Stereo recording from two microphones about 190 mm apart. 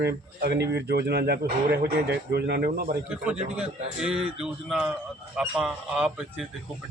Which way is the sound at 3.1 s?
5° right (ahead or behind).